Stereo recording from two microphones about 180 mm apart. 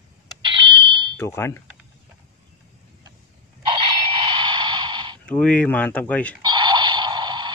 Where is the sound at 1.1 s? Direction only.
15° left (ahead or behind).